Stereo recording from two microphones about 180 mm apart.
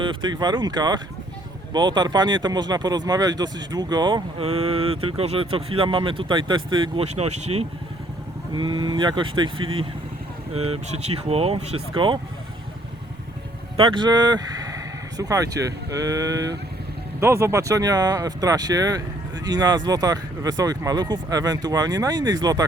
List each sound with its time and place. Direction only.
0.0 s speech: 25° right (ahead or behind)
8.5 s speech: 25° right (ahead or behind)
13.7 s speech: 25° right (ahead or behind)